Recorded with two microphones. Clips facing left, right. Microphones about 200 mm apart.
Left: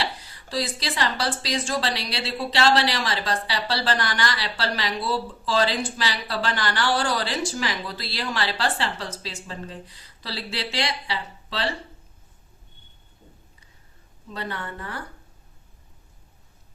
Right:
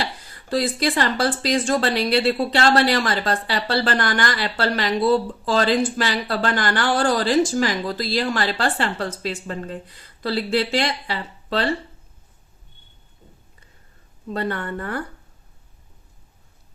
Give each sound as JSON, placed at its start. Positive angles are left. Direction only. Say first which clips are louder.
{"t": 0.0, "sound": "speech", "louder": "right 2 dB", "side_deg": -50}
{"t": 14.3, "sound": "speech", "louder": "right 7 dB", "side_deg": -55}